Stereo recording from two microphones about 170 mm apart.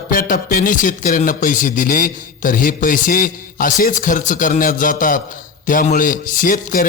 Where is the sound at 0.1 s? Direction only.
55° left (ahead or behind).